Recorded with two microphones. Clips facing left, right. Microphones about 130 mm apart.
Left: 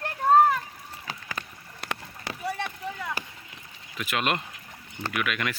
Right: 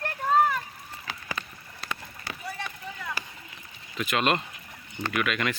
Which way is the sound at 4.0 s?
5° left (ahead or behind).